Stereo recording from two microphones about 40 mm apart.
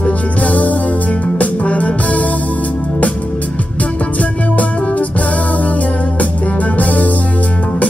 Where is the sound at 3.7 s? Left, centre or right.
Left.